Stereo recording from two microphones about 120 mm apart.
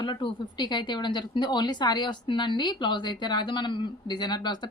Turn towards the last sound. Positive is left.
turn(degrees=35)  # may be behind; listen again after turning